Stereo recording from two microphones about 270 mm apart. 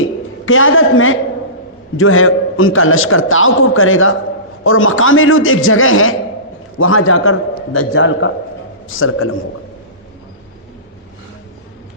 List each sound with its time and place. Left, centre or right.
0.4 s a man's voice: left